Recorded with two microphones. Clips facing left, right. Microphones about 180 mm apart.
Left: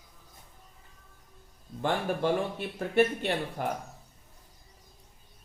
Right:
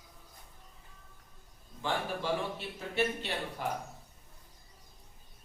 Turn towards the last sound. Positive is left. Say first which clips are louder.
# left 5 dB
turn(degrees=55)  # may be behind; listen again after turning